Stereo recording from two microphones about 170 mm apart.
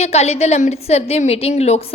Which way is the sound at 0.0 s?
40° left (ahead or behind).